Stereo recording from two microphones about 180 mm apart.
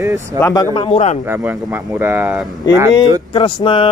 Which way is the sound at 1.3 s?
10° right (ahead or behind).